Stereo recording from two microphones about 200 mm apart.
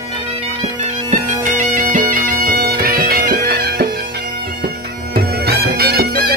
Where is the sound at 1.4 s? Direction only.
40° right (ahead or behind).